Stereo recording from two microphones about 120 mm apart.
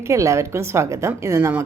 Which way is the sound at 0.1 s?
25° right (ahead or behind).